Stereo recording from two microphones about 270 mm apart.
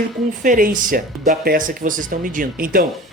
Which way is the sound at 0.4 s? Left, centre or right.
Right.